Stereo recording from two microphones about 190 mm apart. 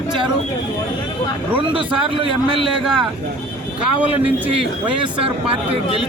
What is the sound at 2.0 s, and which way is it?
A man's voice, 30° right (ahead or behind).